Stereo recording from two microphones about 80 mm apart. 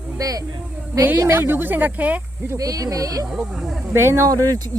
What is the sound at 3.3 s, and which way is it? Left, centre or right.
Speech, centre.